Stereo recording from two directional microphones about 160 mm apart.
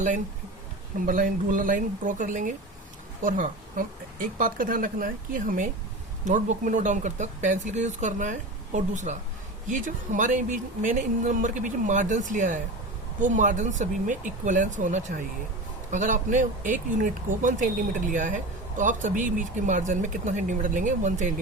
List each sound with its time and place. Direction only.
0.9 s speech: 55° right (ahead or behind)